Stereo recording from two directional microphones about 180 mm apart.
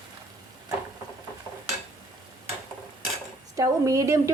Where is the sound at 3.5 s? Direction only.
20° right (ahead or behind).